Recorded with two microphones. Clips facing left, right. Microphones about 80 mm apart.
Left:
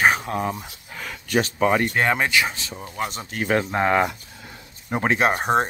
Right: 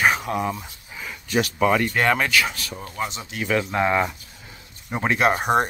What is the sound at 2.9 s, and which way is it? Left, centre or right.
Speech, left.